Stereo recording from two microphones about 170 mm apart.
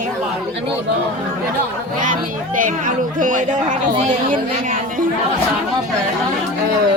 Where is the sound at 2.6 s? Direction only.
50° right (ahead or behind).